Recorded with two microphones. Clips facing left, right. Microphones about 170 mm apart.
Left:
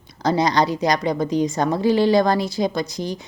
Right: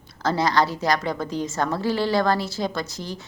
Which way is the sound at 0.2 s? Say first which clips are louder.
Left 3 dB; 15° left (ahead or behind).